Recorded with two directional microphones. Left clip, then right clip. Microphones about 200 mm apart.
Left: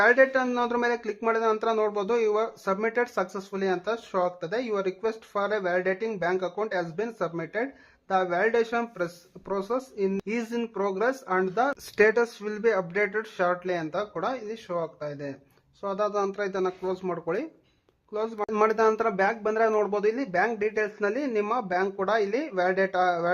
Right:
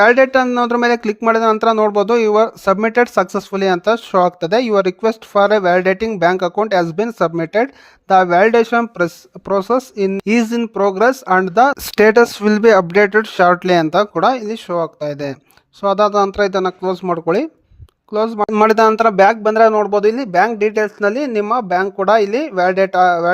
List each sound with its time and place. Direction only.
0.0 s speech: 40° right (ahead or behind)